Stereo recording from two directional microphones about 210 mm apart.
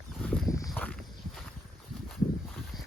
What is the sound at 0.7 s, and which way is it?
Walk, 5° left (ahead or behind).